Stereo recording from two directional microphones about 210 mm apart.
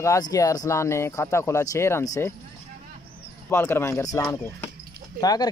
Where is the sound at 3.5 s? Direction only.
10° left (ahead or behind).